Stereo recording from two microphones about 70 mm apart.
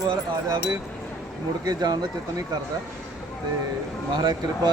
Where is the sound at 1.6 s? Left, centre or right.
Right.